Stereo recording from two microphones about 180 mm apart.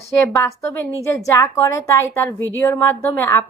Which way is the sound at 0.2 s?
15° left (ahead or behind).